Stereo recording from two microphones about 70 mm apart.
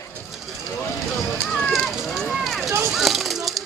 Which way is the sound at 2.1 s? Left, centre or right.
Centre.